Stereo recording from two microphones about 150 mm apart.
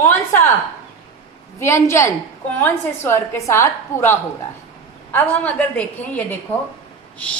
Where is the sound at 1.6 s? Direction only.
20° left (ahead or behind).